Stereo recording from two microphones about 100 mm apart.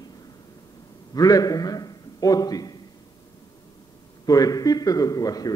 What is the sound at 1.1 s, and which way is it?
A man's voice, 40° left (ahead or behind).